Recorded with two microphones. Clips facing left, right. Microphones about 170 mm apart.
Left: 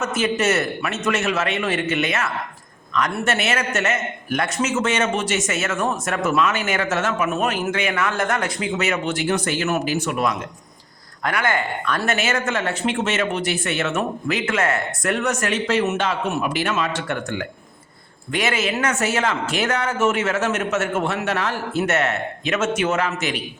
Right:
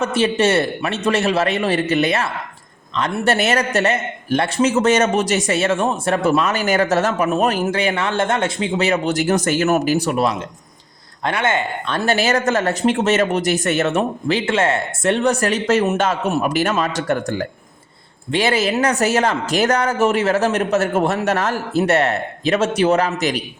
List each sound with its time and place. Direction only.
0.0 s a man's voice: 30° right (ahead or behind)